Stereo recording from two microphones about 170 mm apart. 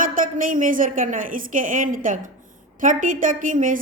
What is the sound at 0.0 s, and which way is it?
A woman's voice, 55° right (ahead or behind).